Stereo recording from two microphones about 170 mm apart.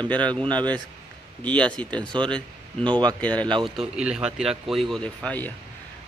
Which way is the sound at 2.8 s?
25° right (ahead or behind).